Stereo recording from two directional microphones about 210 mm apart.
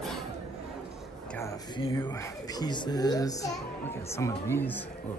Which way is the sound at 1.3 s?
15° left (ahead or behind).